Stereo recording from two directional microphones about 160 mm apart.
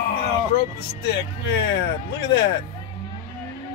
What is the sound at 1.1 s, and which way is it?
Speech, 90° left.